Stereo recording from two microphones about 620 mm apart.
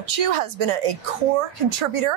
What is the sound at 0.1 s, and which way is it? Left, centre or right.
Speech, right.